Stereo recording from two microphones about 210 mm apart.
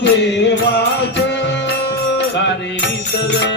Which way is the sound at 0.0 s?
55° left (ahead or behind).